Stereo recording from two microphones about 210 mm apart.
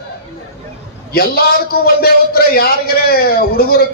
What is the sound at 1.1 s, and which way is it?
A man's voice, 45° left (ahead or behind).